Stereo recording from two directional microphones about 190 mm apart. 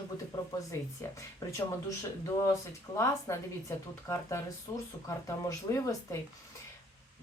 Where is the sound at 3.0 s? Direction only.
15° left (ahead or behind).